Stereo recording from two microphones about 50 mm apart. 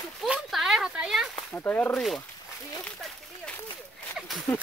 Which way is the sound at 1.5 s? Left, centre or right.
Left.